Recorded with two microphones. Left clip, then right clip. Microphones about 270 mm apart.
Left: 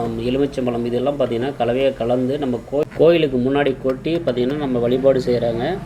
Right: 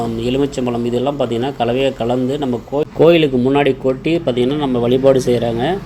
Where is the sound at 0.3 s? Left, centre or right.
Right.